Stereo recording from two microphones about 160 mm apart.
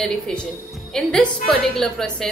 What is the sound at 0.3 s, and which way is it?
A woman's voice, 5° left (ahead or behind).